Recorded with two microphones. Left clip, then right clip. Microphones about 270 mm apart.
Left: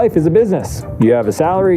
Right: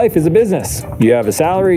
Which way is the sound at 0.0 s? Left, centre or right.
Centre.